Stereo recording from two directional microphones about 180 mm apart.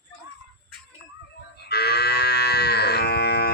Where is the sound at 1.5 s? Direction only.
65° left (ahead or behind).